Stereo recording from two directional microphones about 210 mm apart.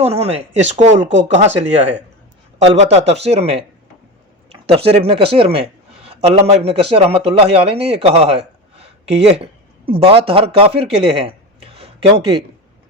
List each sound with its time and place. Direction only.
0.0 s speech: 30° right (ahead or behind)
2.6 s speech: 30° right (ahead or behind)
4.7 s speech: 30° right (ahead or behind)